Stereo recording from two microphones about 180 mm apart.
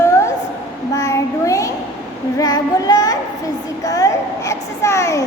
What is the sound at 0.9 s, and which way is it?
Child singing, 20° left (ahead or behind).